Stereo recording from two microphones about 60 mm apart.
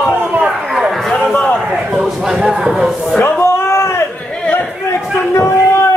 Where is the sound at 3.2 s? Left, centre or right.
Left.